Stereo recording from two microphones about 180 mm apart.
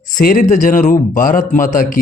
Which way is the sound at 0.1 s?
50° left (ahead or behind).